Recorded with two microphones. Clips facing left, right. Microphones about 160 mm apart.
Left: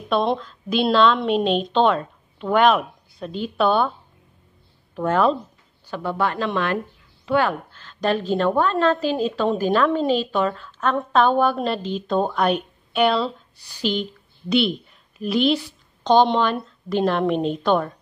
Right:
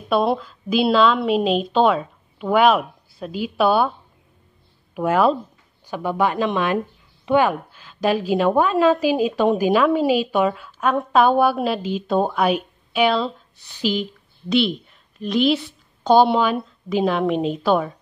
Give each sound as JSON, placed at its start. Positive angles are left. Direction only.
{"t": 0.1, "sound": "a woman's voice", "side_deg": -5}
{"t": 4.9, "sound": "a woman's voice", "side_deg": -10}
{"t": 14.5, "sound": "a woman's voice", "side_deg": 0}